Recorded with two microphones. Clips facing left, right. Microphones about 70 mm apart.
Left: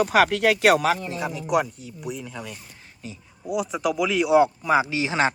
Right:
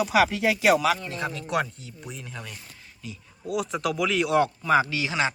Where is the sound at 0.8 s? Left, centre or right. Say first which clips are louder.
Left 2 dB; left.